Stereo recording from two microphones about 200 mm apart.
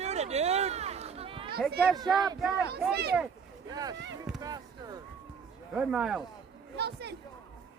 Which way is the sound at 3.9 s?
65° right (ahead or behind).